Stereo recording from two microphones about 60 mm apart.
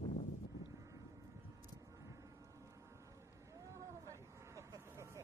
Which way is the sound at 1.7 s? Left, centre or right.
Right.